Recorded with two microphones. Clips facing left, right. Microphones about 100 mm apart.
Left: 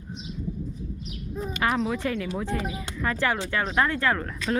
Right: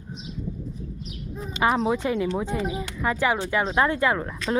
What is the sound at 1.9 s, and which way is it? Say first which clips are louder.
Speech: right 4 dB; 20° right (ahead or behind).